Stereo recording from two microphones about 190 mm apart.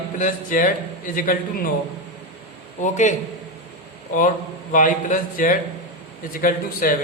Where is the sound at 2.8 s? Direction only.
40° left (ahead or behind).